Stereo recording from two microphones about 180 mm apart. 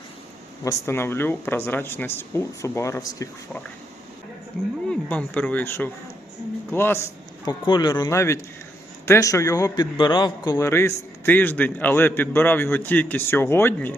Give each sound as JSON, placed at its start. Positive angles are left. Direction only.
{"t": 0.6, "sound": "a man's voice", "side_deg": 15}
{"t": 4.9, "sound": "a man's voice", "side_deg": 10}
{"t": 7.6, "sound": "a man's voice", "side_deg": 25}